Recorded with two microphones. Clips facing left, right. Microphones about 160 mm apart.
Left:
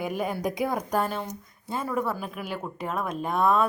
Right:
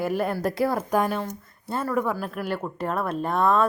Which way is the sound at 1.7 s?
5° left (ahead or behind).